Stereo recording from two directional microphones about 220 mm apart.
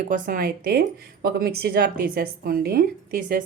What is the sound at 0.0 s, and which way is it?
Speech, 40° right (ahead or behind).